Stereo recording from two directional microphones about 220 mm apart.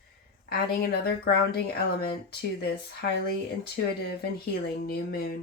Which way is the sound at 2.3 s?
45° left (ahead or behind).